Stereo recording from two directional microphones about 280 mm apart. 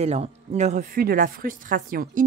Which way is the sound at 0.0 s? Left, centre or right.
Right.